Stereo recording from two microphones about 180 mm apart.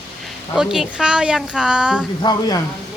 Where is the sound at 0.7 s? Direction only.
5° right (ahead or behind).